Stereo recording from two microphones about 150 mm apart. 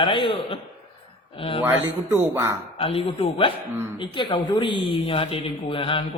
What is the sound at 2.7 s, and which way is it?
Speech, 40° left (ahead or behind).